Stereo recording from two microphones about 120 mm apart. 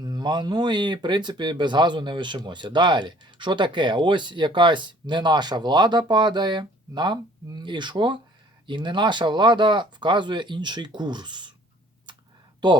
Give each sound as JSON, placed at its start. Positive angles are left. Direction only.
{"t": 0.0, "sound": "speech", "side_deg": -35}
{"t": 12.6, "sound": "speech", "side_deg": -40}